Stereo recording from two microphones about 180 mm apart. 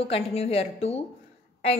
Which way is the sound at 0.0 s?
35° left (ahead or behind).